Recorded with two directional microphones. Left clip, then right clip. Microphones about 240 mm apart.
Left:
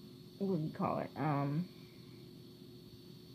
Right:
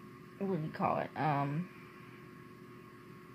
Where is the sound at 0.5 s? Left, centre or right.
Right.